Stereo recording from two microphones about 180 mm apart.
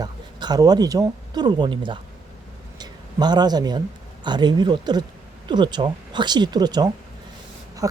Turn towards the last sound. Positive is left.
turn(degrees=-20)  # may be behind; listen again after turning